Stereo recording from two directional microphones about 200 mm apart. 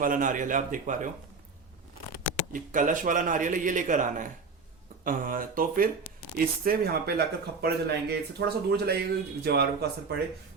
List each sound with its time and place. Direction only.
0.0 s a man's voice: 40° right (ahead or behind)
2.5 s a man's voice: 40° right (ahead or behind)